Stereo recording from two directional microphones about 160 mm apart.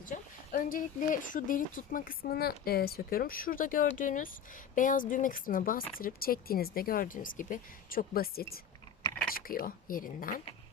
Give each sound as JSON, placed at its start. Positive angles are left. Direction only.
{"t": 0.0, "sound": "speech", "side_deg": 55}